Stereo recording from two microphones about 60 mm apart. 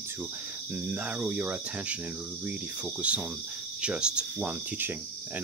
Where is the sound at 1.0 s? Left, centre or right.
Right.